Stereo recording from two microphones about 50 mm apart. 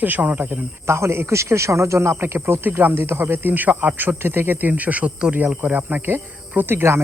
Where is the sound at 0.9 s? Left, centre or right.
Right.